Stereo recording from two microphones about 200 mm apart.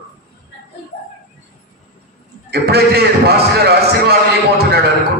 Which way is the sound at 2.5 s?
55° right (ahead or behind).